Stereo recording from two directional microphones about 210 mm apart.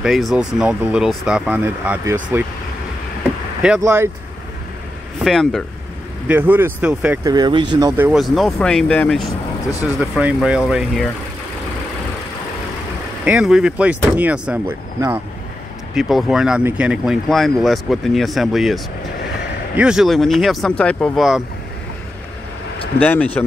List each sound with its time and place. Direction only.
0.0 s speech: centre (ahead or behind)
3.8 s speech: 10° right (ahead or behind)
5.2 s speech: centre (ahead or behind)
6.2 s speech: 10° right (ahead or behind)
7.2 s speech: 20° right (ahead or behind)
8.1 s speech: centre (ahead or behind)
13.2 s speech: 5° right (ahead or behind)
15.9 s speech: centre (ahead or behind)
19.8 s speech: 5° right (ahead or behind)
22.9 s speech: 5° left (ahead or behind)